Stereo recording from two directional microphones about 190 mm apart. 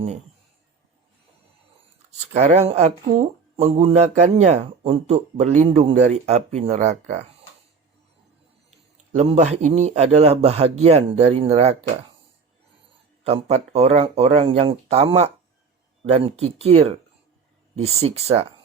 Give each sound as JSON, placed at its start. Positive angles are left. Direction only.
{"t": 2.1, "sound": "speech", "side_deg": -35}
{"t": 9.1, "sound": "speech", "side_deg": -35}
{"t": 13.2, "sound": "speech", "side_deg": -35}